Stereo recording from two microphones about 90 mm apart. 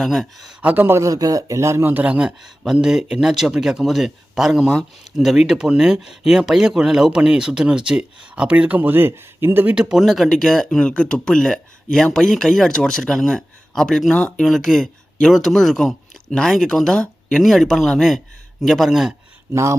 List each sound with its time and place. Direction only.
0.0 s speech: centre (ahead or behind)
0.6 s a man's voice: 20° right (ahead or behind)
0.9 s a man's voice: 40° right (ahead or behind); by 9.7 s 25° right (ahead or behind)
9.9 s speech: 5° right (ahead or behind)